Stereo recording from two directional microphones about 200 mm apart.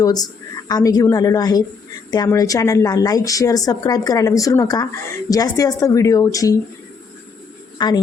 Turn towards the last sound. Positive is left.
turn(degrees=25)  # may be behind; listen again after turning